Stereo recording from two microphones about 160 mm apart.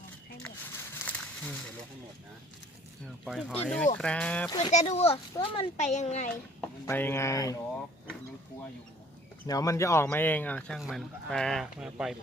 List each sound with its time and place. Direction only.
0.4 s a sound: 10° left (ahead or behind)
3.2 s speech: 5° right (ahead or behind)
3.5 s speech: 5° left (ahead or behind)
4.7 s speech: 45° left (ahead or behind)
5.1 s a child's voice: 35° left (ahead or behind)
5.8 s speech: 45° left (ahead or behind)
6.8 s speech: 15° left (ahead or behind)
9.5 s speech: 20° left (ahead or behind)
10.8 s speech: centre (ahead or behind)